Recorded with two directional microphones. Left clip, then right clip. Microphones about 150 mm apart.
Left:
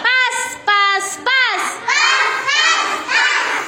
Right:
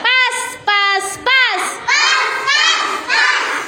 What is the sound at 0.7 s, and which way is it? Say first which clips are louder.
Music: even; 5° right (ahead or behind).